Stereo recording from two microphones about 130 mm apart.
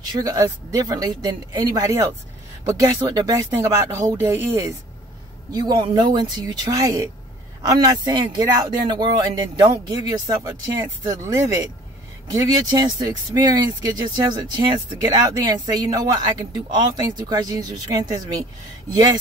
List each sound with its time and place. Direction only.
0.1 s speech: 30° right (ahead or behind)